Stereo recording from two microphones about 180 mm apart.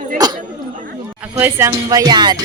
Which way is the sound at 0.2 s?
20° right (ahead or behind).